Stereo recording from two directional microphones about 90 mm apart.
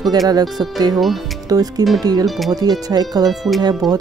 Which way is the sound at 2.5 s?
45° right (ahead or behind).